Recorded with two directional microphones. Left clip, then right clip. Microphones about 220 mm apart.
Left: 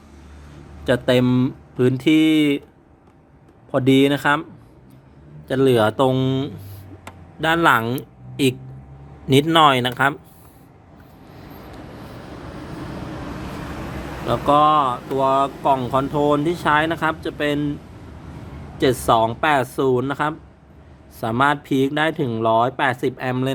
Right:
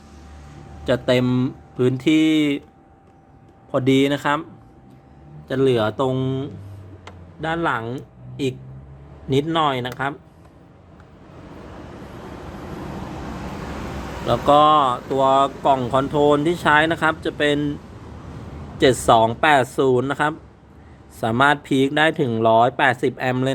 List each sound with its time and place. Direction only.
0.9 s speech: 10° left (ahead or behind)
3.7 s speech: 10° left (ahead or behind)
5.5 s a man's voice: 15° left (ahead or behind)
14.3 s speech: 5° right (ahead or behind)
18.8 s speech: 5° right (ahead or behind)